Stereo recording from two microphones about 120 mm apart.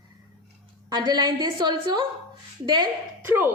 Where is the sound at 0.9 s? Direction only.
35° right (ahead or behind).